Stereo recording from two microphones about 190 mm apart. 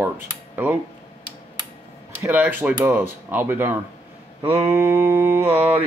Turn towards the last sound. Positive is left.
turn(degrees=-10)  # may be behind; listen again after turning